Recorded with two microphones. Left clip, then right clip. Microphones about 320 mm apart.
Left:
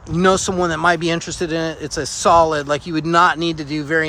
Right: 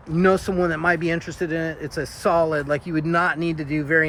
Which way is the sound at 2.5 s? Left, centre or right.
Left.